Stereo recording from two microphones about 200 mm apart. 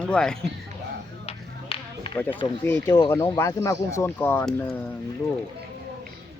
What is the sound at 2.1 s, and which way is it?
Speech, 10° left (ahead or behind).